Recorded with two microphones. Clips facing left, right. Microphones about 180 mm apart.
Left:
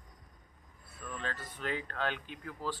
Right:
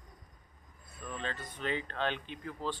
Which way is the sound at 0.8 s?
20° right (ahead or behind).